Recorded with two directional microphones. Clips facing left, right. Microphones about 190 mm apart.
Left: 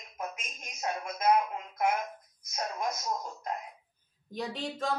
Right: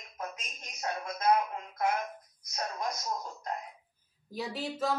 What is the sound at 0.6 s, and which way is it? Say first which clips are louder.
Speech: left 1 dB; 20° left (ahead or behind).